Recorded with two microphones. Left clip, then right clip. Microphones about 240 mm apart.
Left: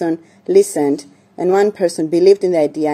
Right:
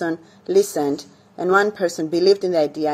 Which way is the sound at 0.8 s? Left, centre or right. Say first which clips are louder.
Left 6 dB; left.